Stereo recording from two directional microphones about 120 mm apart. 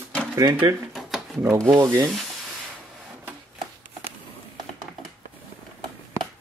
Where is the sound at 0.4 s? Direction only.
35° right (ahead or behind).